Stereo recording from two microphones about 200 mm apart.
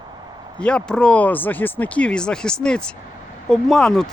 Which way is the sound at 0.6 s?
5° left (ahead or behind).